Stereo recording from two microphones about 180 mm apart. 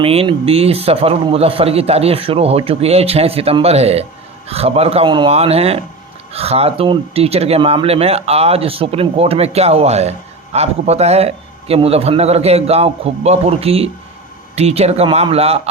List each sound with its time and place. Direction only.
0.0 s speech: 30° right (ahead or behind)